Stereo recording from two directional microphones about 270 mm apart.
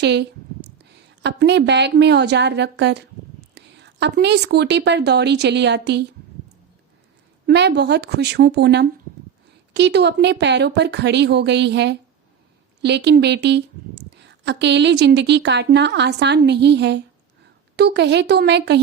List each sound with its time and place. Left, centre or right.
0.0 s a woman's voice: right
7.4 s a woman's voice: right